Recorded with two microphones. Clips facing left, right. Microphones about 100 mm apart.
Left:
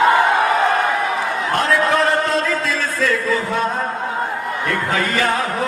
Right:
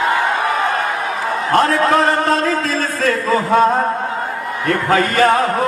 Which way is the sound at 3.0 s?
50° right (ahead or behind).